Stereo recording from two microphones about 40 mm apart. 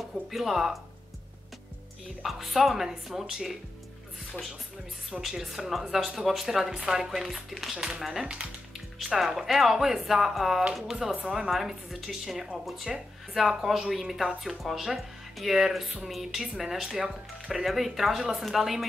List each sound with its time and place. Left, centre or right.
0.3 s speech: centre
2.2 s speech: centre
5.3 s speech: centre
7.7 s speech: centre
8.0 s speech: centre
11.2 s speech: centre